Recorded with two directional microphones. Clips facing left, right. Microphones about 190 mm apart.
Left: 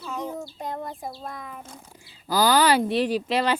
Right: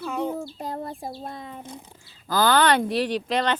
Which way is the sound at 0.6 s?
35° right (ahead or behind).